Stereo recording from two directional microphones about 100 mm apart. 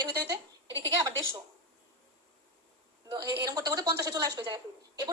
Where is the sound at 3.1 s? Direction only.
35° right (ahead or behind).